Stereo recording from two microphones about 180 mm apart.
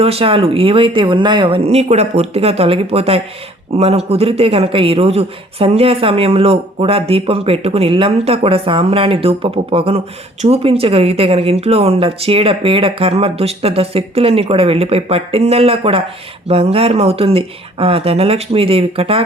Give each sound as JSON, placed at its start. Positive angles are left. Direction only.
{"t": 0.0, "sound": "a woman's voice", "side_deg": -35}